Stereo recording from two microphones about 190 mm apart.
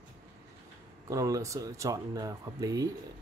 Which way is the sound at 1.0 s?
15° right (ahead or behind).